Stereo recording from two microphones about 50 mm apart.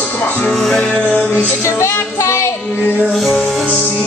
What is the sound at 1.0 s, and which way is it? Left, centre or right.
Music, left.